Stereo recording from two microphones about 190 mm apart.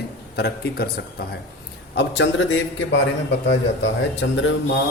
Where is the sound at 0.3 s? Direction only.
60° left (ahead or behind).